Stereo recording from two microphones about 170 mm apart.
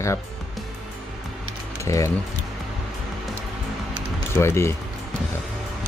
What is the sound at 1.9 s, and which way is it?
Speech, 20° left (ahead or behind).